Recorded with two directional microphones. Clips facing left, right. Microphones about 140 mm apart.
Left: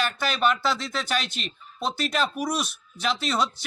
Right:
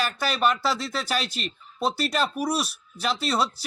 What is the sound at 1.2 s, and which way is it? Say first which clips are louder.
Speech: right 2 dB; 35° right (ahead or behind).